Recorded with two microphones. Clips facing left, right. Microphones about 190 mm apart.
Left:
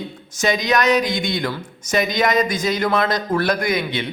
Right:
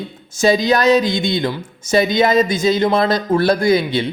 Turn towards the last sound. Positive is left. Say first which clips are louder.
# right 7 dB
turn(degrees=-30)  # may be behind; listen again after turning